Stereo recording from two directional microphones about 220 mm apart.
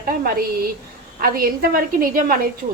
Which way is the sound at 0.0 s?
40° right (ahead or behind).